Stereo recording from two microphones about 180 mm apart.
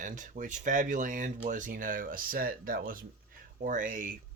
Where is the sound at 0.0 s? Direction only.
45° right (ahead or behind).